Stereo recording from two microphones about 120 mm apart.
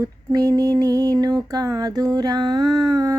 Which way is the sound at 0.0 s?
30° right (ahead or behind).